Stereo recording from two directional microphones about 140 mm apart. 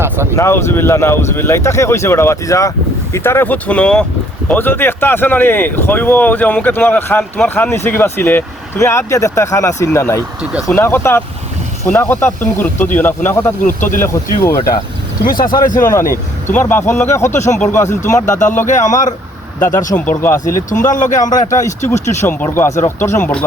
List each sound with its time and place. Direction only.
0.3 s speech: 20° left (ahead or behind)
13.7 s speech: 70° left (ahead or behind)
14.4 s speech: 25° left (ahead or behind)
15.3 s speech: 90° left
15.6 s speech: 70° left (ahead or behind)
15.9 s speech: 20° left (ahead or behind)
18.6 s speech: 60° left (ahead or behind)
19.5 s speech: 15° left (ahead or behind)
20.9 s speech: 65° left (ahead or behind)
22.2 s speech: 10° left (ahead or behind)